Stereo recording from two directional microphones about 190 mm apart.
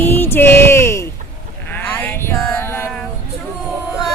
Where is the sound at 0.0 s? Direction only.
10° left (ahead or behind).